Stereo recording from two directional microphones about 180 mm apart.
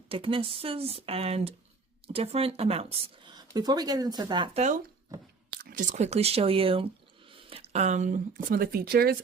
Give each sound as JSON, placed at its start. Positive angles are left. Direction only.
{"t": 0.1, "sound": "speech", "side_deg": -30}
{"t": 4.5, "sound": "speech", "side_deg": -40}